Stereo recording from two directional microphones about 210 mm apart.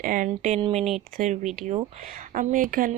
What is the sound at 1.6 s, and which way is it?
Speech, 25° right (ahead or behind).